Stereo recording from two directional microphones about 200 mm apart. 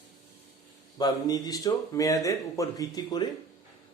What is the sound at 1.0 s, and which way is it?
A man's voice, 20° left (ahead or behind).